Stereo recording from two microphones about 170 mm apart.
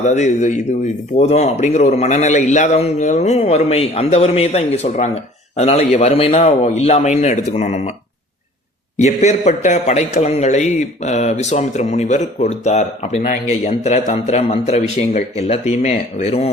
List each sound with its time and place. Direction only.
0.0 s a man's voice: 45° left (ahead or behind)
9.0 s a man's voice: 40° left (ahead or behind)